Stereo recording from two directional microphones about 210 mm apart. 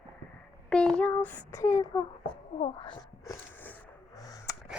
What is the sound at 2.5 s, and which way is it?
Speech, 25° left (ahead or behind).